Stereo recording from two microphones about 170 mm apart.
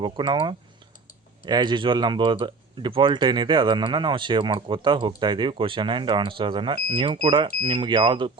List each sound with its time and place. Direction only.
0.0 s speech: 25° right (ahead or behind)